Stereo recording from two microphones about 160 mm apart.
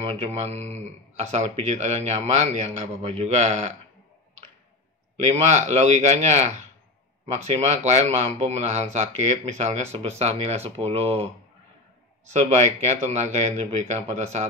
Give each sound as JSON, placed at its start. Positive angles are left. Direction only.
{"t": 0.0, "sound": "a man's voice", "side_deg": -40}
{"t": 5.2, "sound": "a man's voice", "side_deg": -45}
{"t": 12.3, "sound": "a man's voice", "side_deg": -45}